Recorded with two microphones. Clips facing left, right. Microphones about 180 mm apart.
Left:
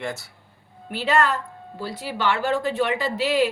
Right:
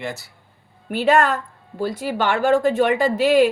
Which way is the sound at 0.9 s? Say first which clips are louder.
Right 5 dB; 50° right (ahead or behind).